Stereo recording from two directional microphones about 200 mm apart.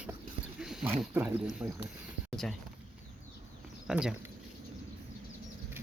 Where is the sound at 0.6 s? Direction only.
5° right (ahead or behind).